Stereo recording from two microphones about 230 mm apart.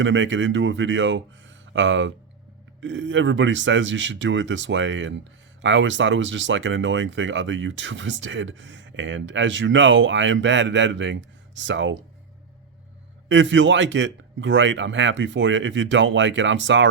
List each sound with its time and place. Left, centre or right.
0.0 s speech: right
13.2 s speech: right